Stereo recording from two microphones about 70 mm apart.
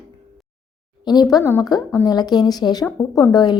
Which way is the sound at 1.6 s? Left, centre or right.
Left.